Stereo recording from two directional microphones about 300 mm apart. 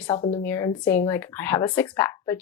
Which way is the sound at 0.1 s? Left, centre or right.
Centre.